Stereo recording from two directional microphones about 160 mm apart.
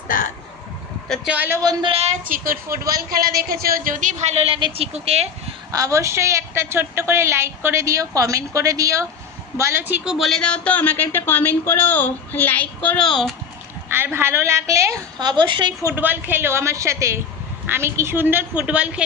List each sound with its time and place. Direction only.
0.1 s speech: 60° left (ahead or behind)
1.0 s speech: centre (ahead or behind)
1.3 s a woman's voice: 10° right (ahead or behind)
1.8 s a woman's voice: 40° right (ahead or behind)
2.2 s a woman's voice: 60° right (ahead or behind); by 5.5 s 40° right (ahead or behind)
5.7 s a woman's voice: 20° right (ahead or behind); by 13.3 s centre (ahead or behind)
13.8 s a woman's voice: 15° right (ahead or behind); by 15.7 s 30° right (ahead or behind)
15.9 s a woman's voice: 10° right (ahead or behind)